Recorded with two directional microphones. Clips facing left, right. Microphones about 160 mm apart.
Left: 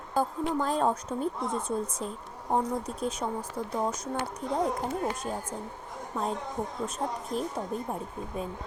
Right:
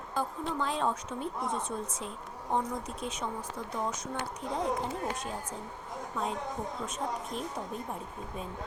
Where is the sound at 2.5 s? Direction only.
35° left (ahead or behind).